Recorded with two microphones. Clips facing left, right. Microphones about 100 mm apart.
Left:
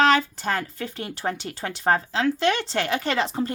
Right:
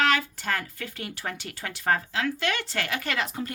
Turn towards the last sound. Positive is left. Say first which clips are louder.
# left 6 dB
turn(degrees=30)  # may be behind; listen again after turning